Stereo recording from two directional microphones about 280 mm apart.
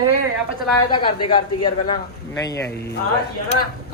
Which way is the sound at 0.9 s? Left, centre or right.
Centre.